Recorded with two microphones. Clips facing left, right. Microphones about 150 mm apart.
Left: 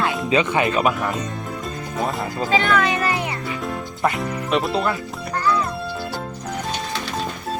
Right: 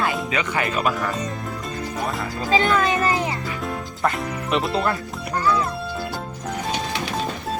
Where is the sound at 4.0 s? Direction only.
Centre (ahead or behind).